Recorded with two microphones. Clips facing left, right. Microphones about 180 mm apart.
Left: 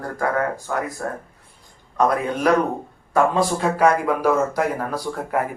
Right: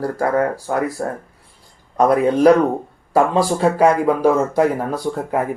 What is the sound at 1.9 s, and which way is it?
A man's voice, 35° right (ahead or behind).